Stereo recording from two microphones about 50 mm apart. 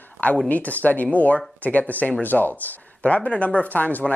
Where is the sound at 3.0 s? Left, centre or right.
Left.